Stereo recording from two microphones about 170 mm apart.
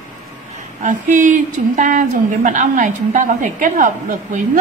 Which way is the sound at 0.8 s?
50° right (ahead or behind).